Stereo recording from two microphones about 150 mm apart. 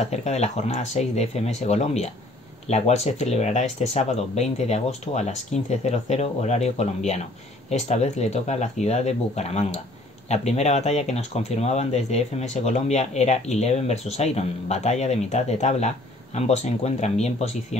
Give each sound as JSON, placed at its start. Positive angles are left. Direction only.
{"t": 0.0, "sound": "speech", "side_deg": 50}